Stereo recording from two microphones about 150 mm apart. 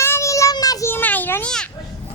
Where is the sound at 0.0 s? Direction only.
20° left (ahead or behind).